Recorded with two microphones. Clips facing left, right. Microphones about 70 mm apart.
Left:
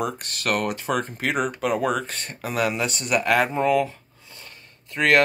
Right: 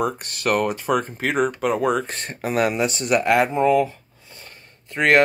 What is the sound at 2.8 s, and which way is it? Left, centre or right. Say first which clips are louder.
Speech: right 4 dB; right.